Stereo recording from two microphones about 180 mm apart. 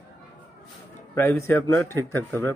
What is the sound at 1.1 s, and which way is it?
A man's voice, 15° left (ahead or behind).